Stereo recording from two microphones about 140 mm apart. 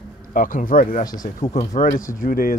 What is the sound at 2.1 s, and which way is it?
Speech, 90° left.